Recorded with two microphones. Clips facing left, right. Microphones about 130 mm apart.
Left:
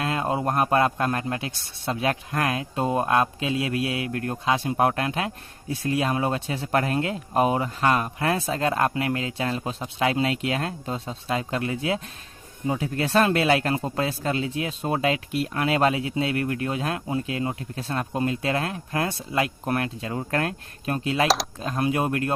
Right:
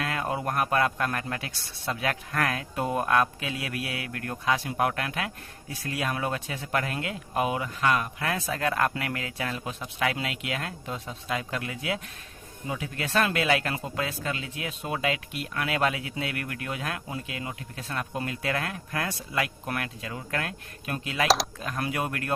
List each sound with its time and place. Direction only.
0.0 s a man's voice: 25° left (ahead or behind)